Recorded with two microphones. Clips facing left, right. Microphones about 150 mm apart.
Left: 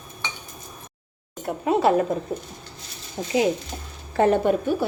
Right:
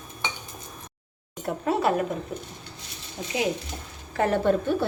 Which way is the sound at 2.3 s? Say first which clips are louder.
Left 4 dB; 35° left (ahead or behind).